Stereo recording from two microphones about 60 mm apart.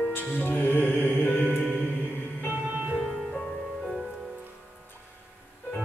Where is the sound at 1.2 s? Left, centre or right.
Left.